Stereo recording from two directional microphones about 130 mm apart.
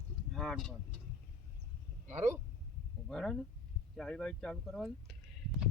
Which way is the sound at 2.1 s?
20° right (ahead or behind).